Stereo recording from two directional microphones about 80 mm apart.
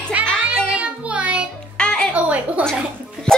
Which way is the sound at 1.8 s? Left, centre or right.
Centre.